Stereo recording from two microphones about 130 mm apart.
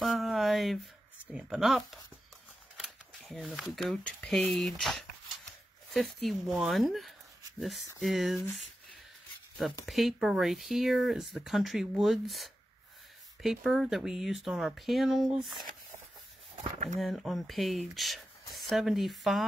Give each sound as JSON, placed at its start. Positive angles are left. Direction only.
{"t": 0.0, "sound": "a sound", "side_deg": 0}
{"t": 1.2, "sound": "speech", "side_deg": -5}
{"t": 9.8, "sound": "speech", "side_deg": 0}
{"t": 16.6, "sound": "speech", "side_deg": -70}
{"t": 17.0, "sound": "speech", "side_deg": 0}